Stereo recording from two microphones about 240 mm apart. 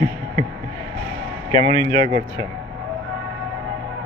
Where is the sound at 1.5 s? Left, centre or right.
Centre.